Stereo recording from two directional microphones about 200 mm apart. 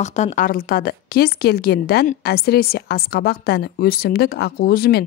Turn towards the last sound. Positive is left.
turn(degrees=50)  # may be behind; listen again after turning